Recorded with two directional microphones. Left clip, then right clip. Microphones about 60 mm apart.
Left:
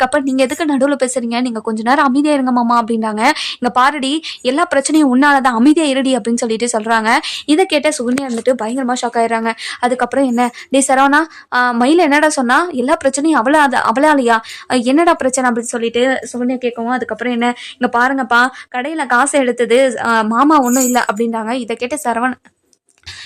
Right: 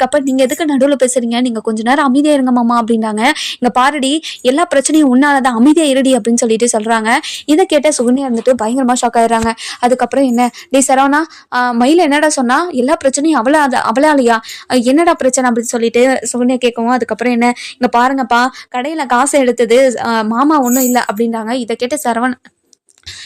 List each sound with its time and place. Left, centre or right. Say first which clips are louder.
0.0 s speech: right 2 dB; right
2.9 s speech: right 1 dB; right
7.1 s a woman's voice: right 1 dB; right
15.8 s speech: right 4 dB; right
16.7 s speech: right 4 dB; right
20.4 s a woman's voice: right 1 dB; centre
21.3 s a woman's voice: right 2 dB; right
21.8 s speech: right 2 dB; right